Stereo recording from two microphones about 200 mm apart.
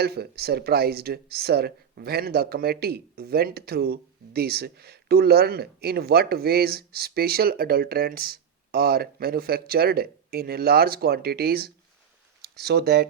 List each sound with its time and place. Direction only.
0.0 s speech: 50° right (ahead or behind)